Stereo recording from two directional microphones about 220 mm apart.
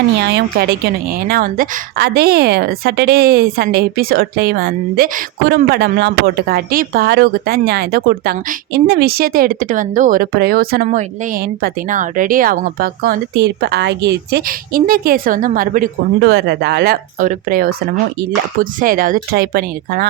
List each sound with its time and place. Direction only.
0.2 s a woman's voice: 50° right (ahead or behind)